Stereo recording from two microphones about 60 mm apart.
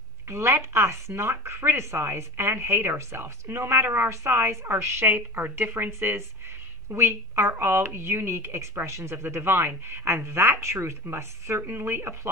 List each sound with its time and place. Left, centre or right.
0.3 s speech: right